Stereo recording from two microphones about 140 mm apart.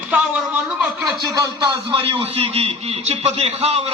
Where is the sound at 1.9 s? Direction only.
40° right (ahead or behind).